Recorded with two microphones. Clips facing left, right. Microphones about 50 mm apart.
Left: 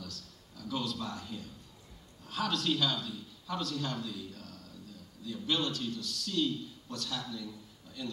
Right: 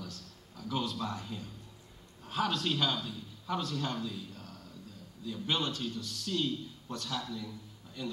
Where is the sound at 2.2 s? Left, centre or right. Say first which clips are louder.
Even; right.